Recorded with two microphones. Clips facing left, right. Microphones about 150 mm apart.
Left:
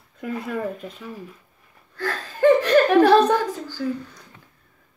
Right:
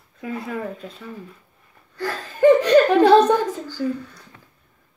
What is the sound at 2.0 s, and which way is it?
Speech, 15° right (ahead or behind).